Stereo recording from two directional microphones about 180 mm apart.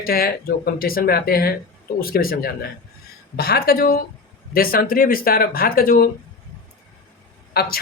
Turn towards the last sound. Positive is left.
turn(degrees=60)  # may be behind; listen again after turning